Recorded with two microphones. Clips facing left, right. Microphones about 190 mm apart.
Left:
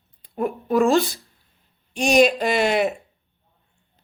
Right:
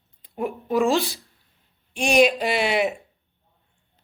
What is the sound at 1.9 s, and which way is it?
Speech, 40° left (ahead or behind).